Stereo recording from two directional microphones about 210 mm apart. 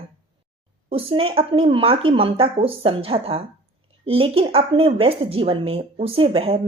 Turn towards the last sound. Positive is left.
turn(degrees=-25)  # may be behind; listen again after turning